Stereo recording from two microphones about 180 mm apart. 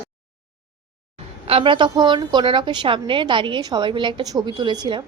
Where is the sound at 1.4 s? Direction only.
30° right (ahead or behind).